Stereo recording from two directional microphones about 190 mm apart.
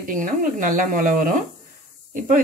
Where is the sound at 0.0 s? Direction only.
45° right (ahead or behind).